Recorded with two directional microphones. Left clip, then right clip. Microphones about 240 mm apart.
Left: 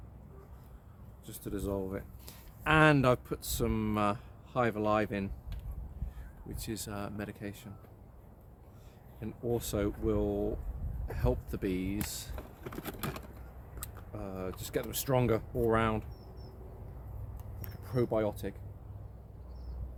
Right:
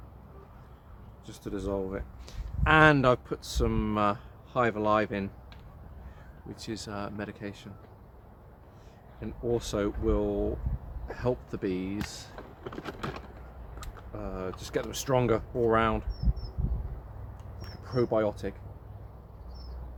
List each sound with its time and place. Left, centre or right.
1.3 s speech: centre
6.5 s speech: centre
9.2 s speech: centre
12.1 s vehicle: left
13.7 s speech: centre
17.7 s speech: centre